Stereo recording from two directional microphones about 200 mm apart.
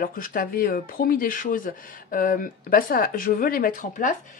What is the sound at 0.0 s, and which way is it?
Speech, 45° left (ahead or behind).